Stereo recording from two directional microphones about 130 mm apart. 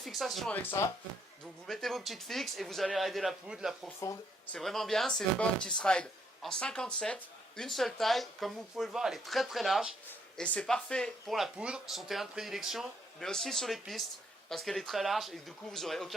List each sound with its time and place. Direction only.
0.0 s speech: centre (ahead or behind)
0.5 s speech: 15° left (ahead or behind)
1.6 s speech: centre (ahead or behind)
4.0 s speech: 25° left (ahead or behind)
4.5 s speech: centre (ahead or behind)